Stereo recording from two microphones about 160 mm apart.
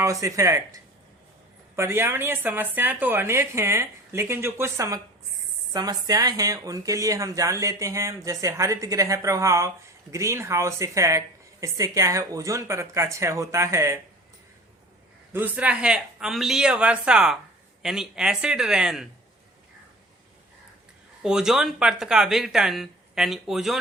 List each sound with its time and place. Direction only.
0.0 s a woman's voice: 20° right (ahead or behind)
15.3 s speech: 10° right (ahead or behind)
21.2 s speech: 5° right (ahead or behind)